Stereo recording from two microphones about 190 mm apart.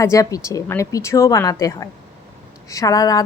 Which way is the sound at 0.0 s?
15° left (ahead or behind).